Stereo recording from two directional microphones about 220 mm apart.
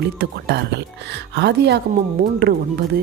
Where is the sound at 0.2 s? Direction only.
50° right (ahead or behind).